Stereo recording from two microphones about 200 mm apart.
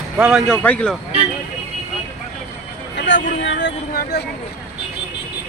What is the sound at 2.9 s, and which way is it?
Speech, 65° left (ahead or behind).